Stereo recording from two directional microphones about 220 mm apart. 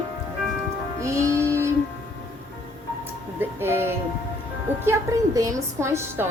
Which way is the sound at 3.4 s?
10° right (ahead or behind).